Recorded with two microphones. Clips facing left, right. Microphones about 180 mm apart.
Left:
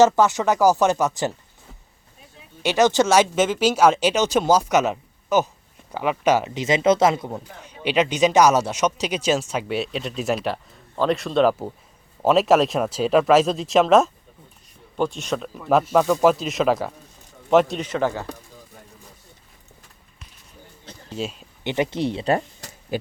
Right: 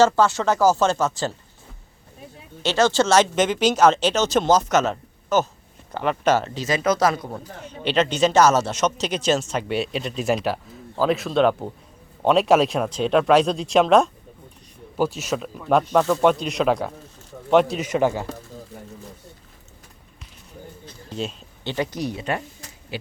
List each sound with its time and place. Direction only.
0.0 s a man's voice: 15° left (ahead or behind)
2.6 s a man's voice: 15° left (ahead or behind)
7.3 s a man's voice: 10° left (ahead or behind); by 18.3 s 15° right (ahead or behind)
21.1 s speech: 5° left (ahead or behind)
21.6 s speech: 20° left (ahead or behind); by 23.0 s 35° left (ahead or behind)